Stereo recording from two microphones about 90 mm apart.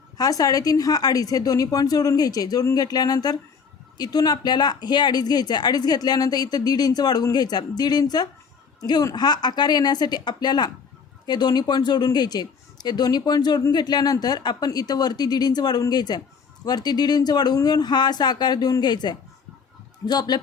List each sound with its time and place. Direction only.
0.2 s speech: 45° left (ahead or behind)